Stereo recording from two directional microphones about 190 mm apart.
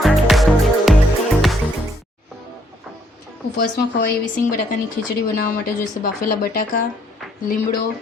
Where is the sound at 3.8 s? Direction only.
55° left (ahead or behind).